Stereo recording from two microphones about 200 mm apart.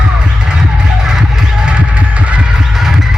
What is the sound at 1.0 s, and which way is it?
Music, centre (ahead or behind).